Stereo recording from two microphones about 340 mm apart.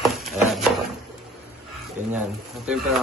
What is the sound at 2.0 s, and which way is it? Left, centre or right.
Speech, right.